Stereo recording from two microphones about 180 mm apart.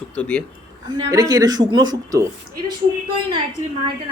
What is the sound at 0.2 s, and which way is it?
Speech, 5° left (ahead or behind).